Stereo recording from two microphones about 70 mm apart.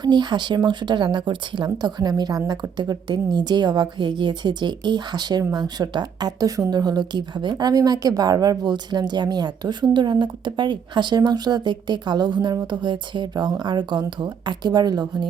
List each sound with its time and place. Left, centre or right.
0.0 s speech: right